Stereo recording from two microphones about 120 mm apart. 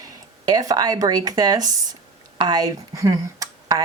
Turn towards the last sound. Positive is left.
turn(degrees=-30)  # may be behind; listen again after turning